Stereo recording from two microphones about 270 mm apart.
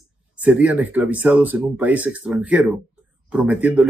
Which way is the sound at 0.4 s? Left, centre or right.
Centre.